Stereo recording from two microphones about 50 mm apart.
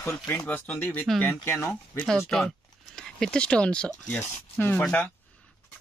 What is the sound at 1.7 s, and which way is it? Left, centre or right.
Speech, centre.